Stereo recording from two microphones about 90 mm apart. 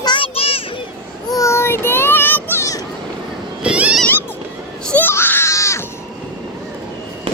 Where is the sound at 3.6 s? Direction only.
10° right (ahead or behind).